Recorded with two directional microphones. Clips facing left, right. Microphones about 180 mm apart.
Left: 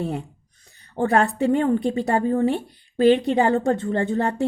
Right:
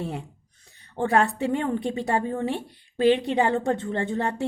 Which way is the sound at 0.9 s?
40° left (ahead or behind).